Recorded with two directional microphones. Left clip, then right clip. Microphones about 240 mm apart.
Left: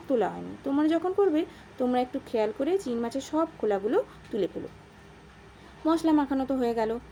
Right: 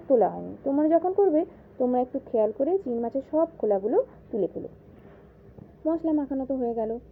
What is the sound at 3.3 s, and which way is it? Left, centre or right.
Speech, left.